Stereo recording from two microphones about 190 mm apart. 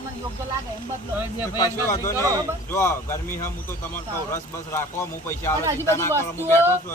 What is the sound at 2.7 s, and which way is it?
Speech, 15° left (ahead or behind).